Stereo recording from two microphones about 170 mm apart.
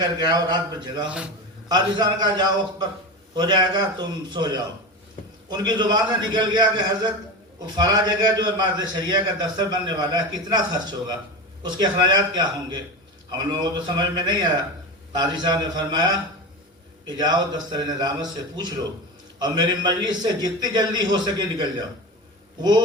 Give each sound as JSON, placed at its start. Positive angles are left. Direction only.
{"t": 0.0, "sound": "a man's voice", "side_deg": -25}